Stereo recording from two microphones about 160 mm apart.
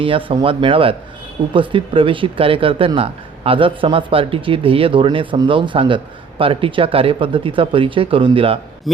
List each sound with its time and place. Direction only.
0.0 s speech: 35° right (ahead or behind)